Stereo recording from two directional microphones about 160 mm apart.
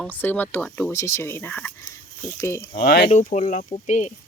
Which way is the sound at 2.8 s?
85° left.